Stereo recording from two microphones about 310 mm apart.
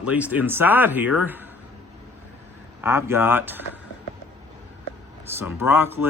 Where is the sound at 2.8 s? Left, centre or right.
Centre.